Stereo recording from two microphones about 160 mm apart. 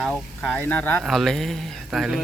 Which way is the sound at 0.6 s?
10° left (ahead or behind).